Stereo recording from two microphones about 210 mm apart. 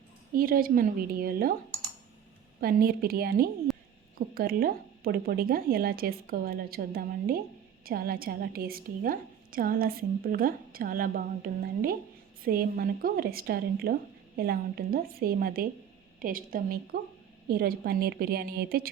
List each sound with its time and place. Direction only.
0.3 s a woman's voice: 45° right (ahead or behind)
2.6 s a woman's voice: 45° right (ahead or behind)